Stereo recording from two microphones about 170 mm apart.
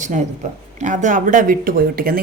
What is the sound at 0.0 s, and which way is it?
Speech, 45° right (ahead or behind).